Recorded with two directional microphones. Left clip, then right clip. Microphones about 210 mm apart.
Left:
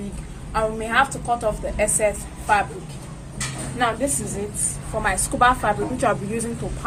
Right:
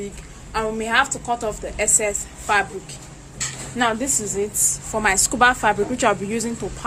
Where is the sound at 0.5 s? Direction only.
40° right (ahead or behind).